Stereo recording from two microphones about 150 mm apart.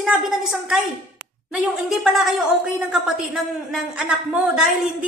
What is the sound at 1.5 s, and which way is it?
A woman's voice, 5° right (ahead or behind).